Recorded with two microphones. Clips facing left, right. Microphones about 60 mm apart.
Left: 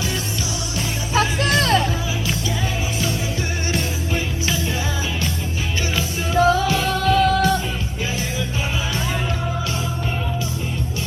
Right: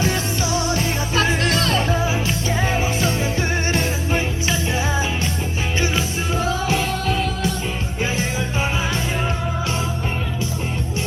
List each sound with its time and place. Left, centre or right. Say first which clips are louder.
0.8 s music: even; right
3.7 s music: right 2 dB; right
6.7 s music: left 2 dB; right
7.3 s music: left 7 dB; left